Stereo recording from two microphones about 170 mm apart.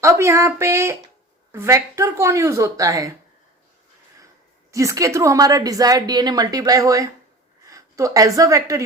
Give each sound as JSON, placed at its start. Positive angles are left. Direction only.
{"t": 0.0, "sound": "speech", "side_deg": -15}
{"t": 4.7, "sound": "a woman's voice", "side_deg": -20}